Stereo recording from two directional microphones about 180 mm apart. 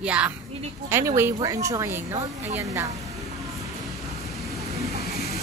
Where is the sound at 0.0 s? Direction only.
5° right (ahead or behind).